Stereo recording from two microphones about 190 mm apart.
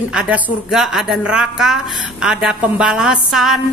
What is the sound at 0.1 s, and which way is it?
A woman's voice, 5° right (ahead or behind).